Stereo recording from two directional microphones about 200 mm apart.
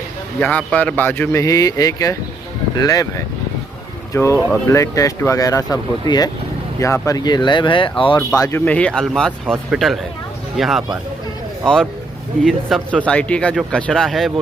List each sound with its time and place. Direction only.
0.4 s speech: 5° left (ahead or behind)
4.1 s speech: 15° left (ahead or behind)
8.4 s speech: 10° left (ahead or behind)